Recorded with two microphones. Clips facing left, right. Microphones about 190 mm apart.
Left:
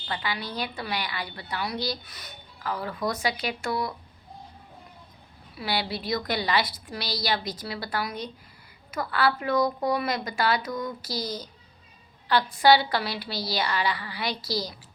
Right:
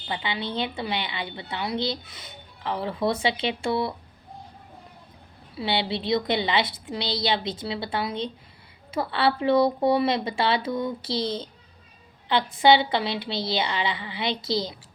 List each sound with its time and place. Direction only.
0.1 s a woman's voice: 25° right (ahead or behind)
5.5 s a woman's voice: 25° right (ahead or behind)